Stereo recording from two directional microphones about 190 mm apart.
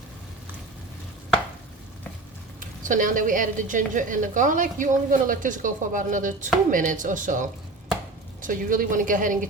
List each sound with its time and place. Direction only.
2.6 s a woman's voice: 45° right (ahead or behind)